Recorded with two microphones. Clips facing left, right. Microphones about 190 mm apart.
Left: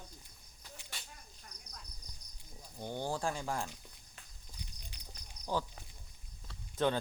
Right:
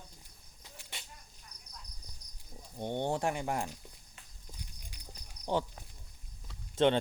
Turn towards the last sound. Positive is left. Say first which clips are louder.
# right 5 dB
turn(degrees=-25)  # may be behind; listen again after turning